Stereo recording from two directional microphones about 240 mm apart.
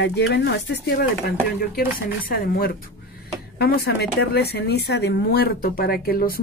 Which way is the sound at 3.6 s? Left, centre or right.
Left.